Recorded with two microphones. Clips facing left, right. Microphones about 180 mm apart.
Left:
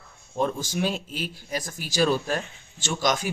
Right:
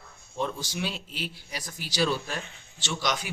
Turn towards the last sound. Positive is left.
turn(degrees=45)  # may be behind; listen again after turning